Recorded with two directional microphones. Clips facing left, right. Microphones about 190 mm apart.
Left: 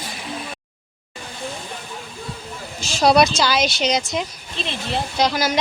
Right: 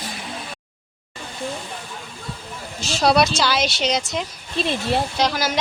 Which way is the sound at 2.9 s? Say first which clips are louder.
Left 2 dB; centre (ahead or behind).